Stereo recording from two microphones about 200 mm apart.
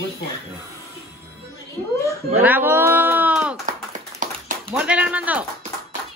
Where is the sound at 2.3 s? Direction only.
10° right (ahead or behind).